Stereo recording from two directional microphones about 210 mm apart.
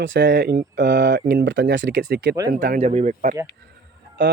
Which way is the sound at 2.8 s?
35° right (ahead or behind).